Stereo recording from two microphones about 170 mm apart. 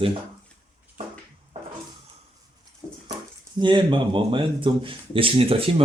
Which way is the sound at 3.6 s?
30° right (ahead or behind).